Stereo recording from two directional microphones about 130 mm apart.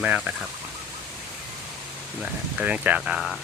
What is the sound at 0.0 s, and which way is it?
Speech, 10° right (ahead or behind).